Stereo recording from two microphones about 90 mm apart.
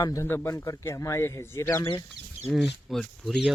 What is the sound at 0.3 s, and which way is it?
Speech, 25° left (ahead or behind).